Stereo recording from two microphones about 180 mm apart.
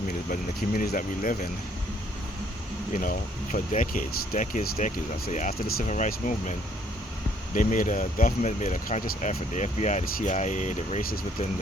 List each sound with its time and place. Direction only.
0.8 s speech: 50° left (ahead or behind)
2.9 s speech: 50° left (ahead or behind)